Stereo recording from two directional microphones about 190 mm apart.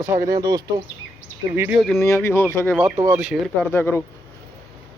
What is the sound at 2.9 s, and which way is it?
Speech, 10° right (ahead or behind).